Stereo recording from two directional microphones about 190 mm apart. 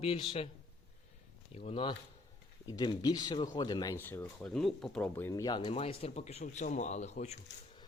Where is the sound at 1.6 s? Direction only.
30° left (ahead or behind).